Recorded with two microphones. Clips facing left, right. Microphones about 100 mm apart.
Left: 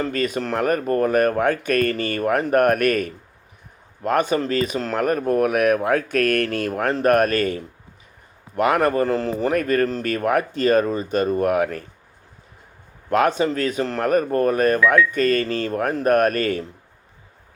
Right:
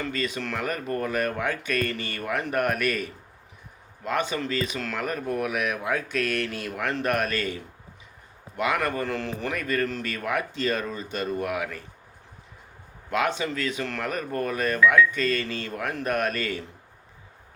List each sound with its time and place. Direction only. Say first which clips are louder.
0.1 s speech: left 7 dB; 50° left (ahead or behind)
13.1 s speech: left 8 dB; 45° left (ahead or behind)